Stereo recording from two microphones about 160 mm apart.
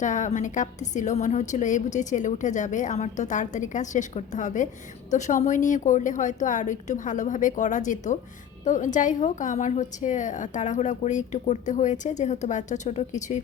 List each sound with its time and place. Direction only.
0.0 s a woman's voice: 50° left (ahead or behind)